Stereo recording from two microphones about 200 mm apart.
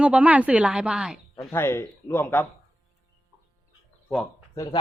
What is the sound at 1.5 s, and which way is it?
Speech, 10° left (ahead or behind).